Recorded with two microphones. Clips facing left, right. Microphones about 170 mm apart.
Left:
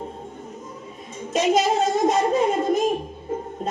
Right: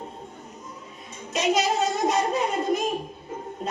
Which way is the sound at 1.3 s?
50° left (ahead or behind).